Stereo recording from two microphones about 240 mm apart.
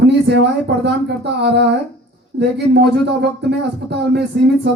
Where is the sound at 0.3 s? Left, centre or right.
Right.